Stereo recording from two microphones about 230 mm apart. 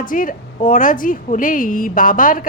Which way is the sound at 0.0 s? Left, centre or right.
Left.